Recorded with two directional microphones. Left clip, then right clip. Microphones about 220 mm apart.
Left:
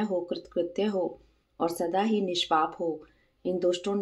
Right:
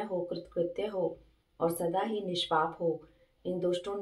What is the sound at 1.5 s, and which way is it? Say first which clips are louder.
Speech: left 3 dB; 30° left (ahead or behind).